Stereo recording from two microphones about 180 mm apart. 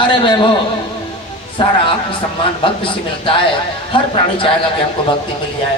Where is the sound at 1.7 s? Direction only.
30° left (ahead or behind).